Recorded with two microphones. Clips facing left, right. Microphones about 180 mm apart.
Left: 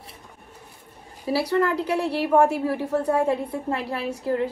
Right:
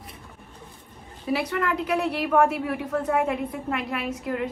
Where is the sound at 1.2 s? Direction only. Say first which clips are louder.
Left 4 dB; 35° left (ahead or behind).